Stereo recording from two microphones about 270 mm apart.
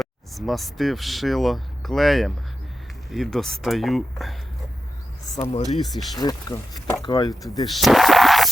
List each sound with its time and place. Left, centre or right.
0.0 s speech: centre
5.4 s speech: left
6.1 s speech: centre
7.7 s a sound: centre